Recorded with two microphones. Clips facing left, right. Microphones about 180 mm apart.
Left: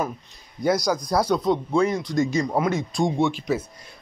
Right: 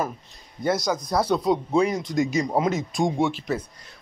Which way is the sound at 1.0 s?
5° right (ahead or behind).